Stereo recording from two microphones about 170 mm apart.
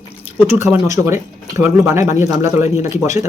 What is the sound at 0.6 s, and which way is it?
Speech, 15° right (ahead or behind).